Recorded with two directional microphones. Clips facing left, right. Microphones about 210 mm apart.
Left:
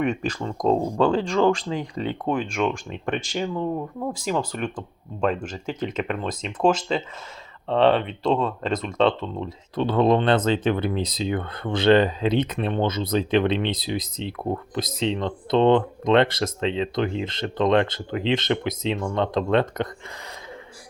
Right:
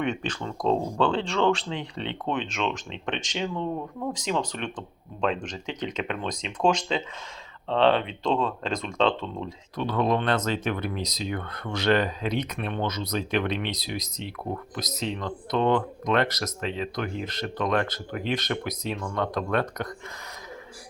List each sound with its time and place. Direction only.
0.0 s speech: 10° left (ahead or behind)
9.7 s speech: 30° left (ahead or behind)